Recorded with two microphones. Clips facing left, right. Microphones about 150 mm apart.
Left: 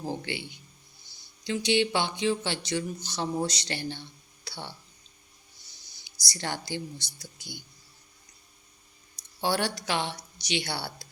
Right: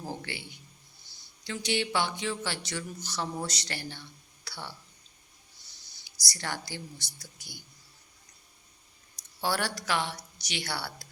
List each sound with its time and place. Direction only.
0.0 s speech: 20° left (ahead or behind)
5.9 s speech: 20° left (ahead or behind)
9.4 s speech: 20° left (ahead or behind)